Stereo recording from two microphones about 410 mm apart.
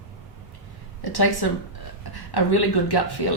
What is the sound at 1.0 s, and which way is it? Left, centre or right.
A woman's voice, left.